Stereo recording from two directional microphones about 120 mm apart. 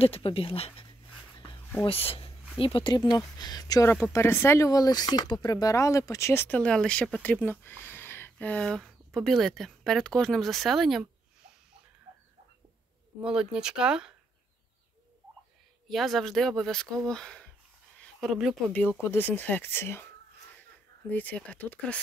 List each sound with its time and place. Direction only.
0.0 s speech: 55° left (ahead or behind)
1.9 s speech: 50° left (ahead or behind); by 11.1 s centre (ahead or behind)
13.2 s speech: 5° right (ahead or behind)
15.9 s speech: centre (ahead or behind)
18.7 s speech: 15° left (ahead or behind)
21.1 s speech: 15° left (ahead or behind)